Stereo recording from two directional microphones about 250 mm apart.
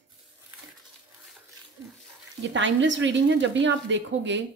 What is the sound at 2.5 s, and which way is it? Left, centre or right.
A woman's voice, right.